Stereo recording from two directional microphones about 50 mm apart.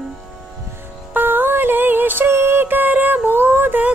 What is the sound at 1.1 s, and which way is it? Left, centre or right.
Music, right.